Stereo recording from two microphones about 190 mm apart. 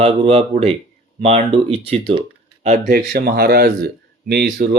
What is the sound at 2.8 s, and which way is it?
Speech, 60° right (ahead or behind).